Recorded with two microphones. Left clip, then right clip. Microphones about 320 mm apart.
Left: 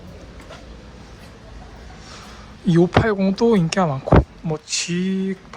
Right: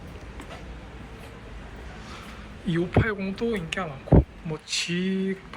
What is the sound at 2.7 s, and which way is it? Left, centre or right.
Speech, centre.